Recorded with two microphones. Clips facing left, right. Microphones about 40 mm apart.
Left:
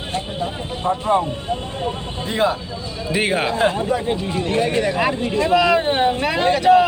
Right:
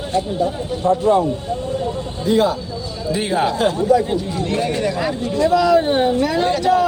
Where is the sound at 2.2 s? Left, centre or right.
Left.